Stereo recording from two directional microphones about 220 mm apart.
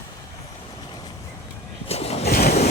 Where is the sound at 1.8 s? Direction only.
30° left (ahead or behind).